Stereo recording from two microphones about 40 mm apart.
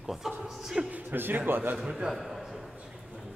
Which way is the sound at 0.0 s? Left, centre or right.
Centre.